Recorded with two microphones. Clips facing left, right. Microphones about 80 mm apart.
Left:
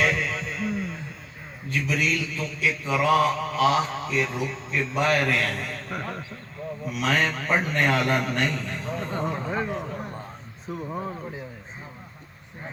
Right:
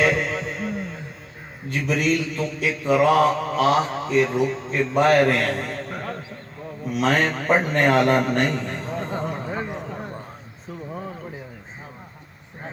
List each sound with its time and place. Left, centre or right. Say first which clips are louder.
0.0 s a sound: right 4 dB; right
1.7 s mantra: right 4 dB; right
6.9 s mantra: right 4 dB; right
9.3 s a man's voice: left 1 dB; centre
9.7 s a sound: even; centre
10.7 s speech: left 2 dB; centre